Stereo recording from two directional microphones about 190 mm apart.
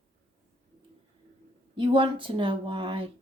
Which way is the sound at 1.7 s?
25° right (ahead or behind).